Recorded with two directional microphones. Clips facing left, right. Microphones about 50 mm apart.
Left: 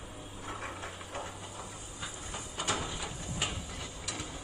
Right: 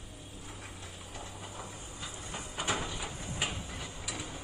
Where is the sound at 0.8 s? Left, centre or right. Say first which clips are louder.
Left 5 dB; left.